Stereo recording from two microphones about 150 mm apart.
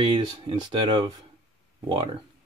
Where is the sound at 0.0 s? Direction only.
30° right (ahead or behind).